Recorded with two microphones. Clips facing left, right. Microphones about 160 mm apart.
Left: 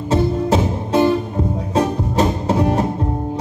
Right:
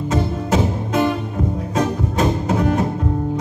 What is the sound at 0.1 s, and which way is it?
Music, 30° left (ahead or behind).